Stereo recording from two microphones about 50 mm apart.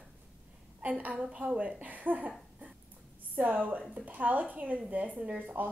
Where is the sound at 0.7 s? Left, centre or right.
Right.